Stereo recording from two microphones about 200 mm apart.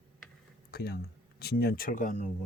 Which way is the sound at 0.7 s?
50° left (ahead or behind).